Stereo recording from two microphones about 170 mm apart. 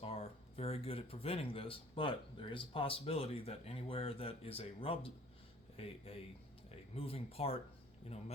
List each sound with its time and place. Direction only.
0.0 s speech: 35° left (ahead or behind)